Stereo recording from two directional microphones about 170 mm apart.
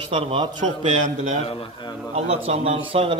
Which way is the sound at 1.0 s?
40° right (ahead or behind).